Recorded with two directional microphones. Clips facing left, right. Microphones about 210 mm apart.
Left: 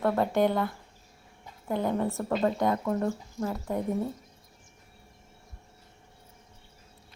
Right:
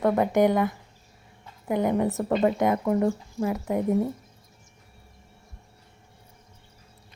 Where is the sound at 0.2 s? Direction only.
15° right (ahead or behind).